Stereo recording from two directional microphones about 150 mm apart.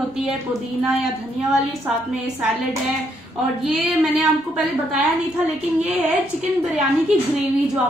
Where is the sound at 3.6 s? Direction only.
Centre (ahead or behind).